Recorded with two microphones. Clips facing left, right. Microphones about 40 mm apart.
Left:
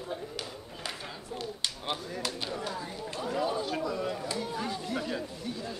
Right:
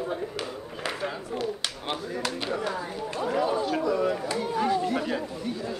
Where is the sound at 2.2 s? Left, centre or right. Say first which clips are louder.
Right 6 dB; right.